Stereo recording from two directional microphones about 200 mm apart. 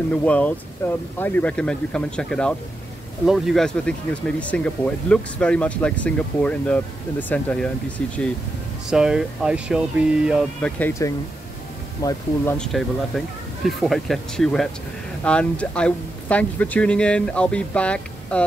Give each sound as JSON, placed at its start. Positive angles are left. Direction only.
{"t": 0.1, "sound": "speech", "side_deg": 5}
{"t": 12.5, "sound": "speech", "side_deg": 0}